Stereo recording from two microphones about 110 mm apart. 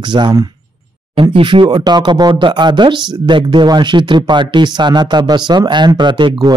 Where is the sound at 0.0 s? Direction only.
45° right (ahead or behind).